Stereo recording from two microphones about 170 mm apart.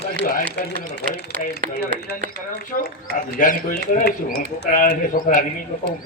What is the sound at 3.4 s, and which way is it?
Speech, 60° left (ahead or behind).